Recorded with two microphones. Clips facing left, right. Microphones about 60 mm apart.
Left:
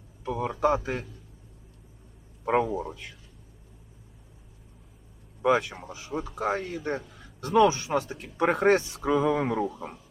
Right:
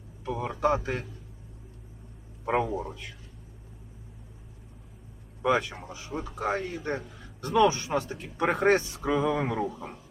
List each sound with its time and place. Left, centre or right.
0.3 s speech: centre
2.4 s speech: centre
5.4 s a man's voice: centre
6.1 s a man's voice: centre
7.7 s speech: centre
8.2 s speech: centre
9.6 s speech: centre